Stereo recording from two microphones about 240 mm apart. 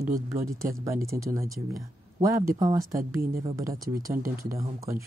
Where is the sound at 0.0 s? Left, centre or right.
Right.